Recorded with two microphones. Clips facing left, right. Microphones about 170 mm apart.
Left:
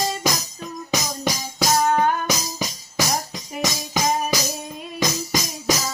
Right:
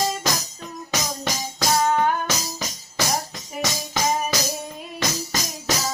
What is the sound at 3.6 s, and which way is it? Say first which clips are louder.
Music: left 1 dB; 10° left (ahead or behind).